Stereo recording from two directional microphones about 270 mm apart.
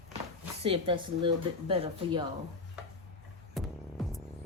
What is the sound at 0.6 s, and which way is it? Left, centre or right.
Speech, centre.